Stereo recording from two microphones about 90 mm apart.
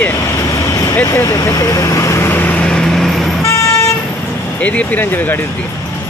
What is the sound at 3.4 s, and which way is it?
Vehicle, 35° left (ahead or behind).